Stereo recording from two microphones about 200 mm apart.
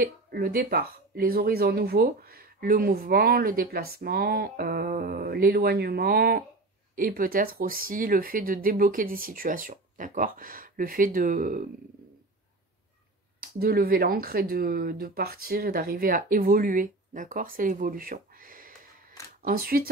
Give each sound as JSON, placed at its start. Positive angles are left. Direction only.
{"t": 0.0, "sound": "speech", "side_deg": -45}
{"t": 13.4, "sound": "speech", "side_deg": -50}